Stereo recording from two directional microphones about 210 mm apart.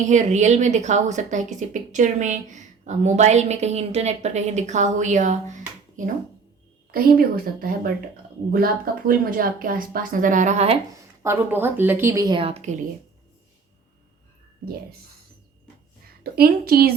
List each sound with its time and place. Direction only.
0.0 s a woman's voice: 35° right (ahead or behind)
11.2 s a woman's voice: 10° right (ahead or behind); by 12.7 s 30° right (ahead or behind)
16.2 s a woman's voice: 45° right (ahead or behind)